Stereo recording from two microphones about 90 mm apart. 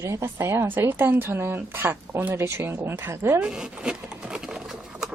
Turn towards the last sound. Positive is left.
turn(degrees=-5)  # may be behind; listen again after turning